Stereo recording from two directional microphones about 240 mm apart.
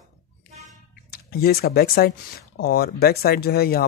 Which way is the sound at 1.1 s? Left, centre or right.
Left.